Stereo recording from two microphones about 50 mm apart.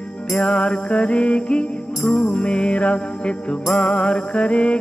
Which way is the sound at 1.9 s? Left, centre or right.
Centre.